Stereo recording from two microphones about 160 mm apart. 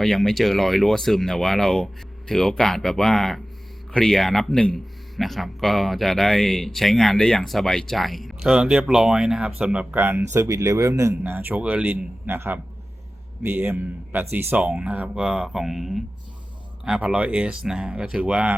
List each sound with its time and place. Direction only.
0.0 s speech: 5° left (ahead or behind)